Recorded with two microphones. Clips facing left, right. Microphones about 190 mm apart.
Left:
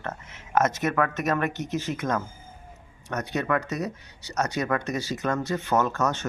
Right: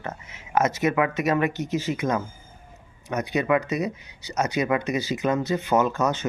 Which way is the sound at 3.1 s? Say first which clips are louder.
Right 4 dB; 5° right (ahead or behind).